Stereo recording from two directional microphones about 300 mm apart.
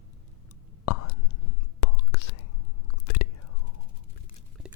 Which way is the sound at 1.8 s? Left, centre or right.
Left.